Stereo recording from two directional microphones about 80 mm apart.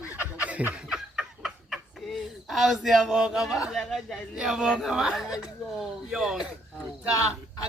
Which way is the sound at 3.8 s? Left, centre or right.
Centre.